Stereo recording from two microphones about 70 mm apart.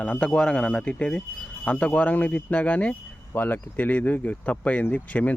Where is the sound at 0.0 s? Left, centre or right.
Centre.